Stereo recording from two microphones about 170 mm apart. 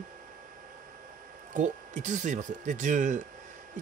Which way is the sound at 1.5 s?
45° right (ahead or behind).